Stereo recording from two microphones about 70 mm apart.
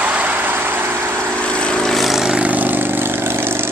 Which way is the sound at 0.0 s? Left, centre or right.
Centre.